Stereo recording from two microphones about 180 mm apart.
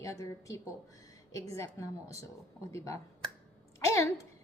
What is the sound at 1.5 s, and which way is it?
Speech, 15° left (ahead or behind).